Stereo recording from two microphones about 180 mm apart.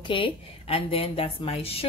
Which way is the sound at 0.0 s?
30° left (ahead or behind).